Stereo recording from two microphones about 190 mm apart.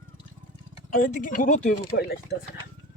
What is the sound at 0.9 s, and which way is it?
Speech, 45° left (ahead or behind).